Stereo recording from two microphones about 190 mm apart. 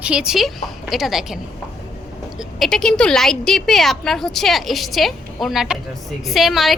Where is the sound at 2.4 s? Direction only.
Centre (ahead or behind).